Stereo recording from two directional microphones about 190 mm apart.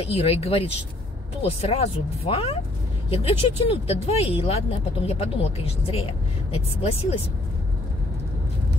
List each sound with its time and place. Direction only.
0.0 s speech: 30° left (ahead or behind)